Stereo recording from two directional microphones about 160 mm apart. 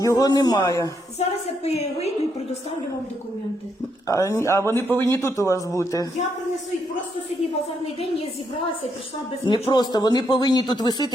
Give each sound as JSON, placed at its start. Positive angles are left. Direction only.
{"t": 0.0, "sound": "speech", "side_deg": 20}
{"t": 1.2, "sound": "a woman's voice", "side_deg": 40}
{"t": 4.0, "sound": "speech", "side_deg": 20}
{"t": 9.5, "sound": "speech", "side_deg": 30}